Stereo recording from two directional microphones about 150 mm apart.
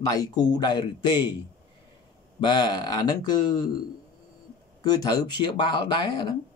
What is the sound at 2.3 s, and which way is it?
Speech, 30° left (ahead or behind).